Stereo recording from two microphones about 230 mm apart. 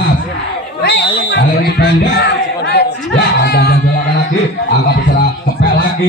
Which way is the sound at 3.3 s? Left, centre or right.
Left.